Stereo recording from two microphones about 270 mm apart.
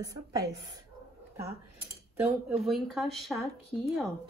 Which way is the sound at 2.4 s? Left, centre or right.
Centre.